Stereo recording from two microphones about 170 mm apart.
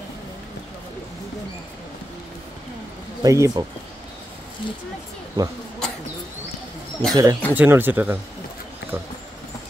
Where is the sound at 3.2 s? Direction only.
20° right (ahead or behind).